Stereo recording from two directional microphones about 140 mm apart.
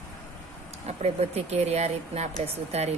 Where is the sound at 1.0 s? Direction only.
50° right (ahead or behind).